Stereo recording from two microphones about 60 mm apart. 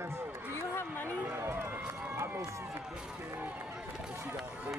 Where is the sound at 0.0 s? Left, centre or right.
Right.